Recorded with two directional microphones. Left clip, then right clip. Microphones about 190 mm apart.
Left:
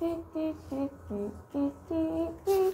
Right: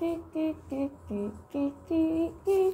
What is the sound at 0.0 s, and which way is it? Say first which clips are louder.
Mantra: right 1 dB; 20° right (ahead or behind).